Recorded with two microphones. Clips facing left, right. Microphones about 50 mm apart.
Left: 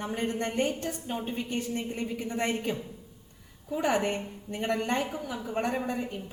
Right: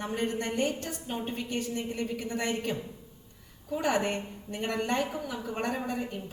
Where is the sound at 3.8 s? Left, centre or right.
Centre.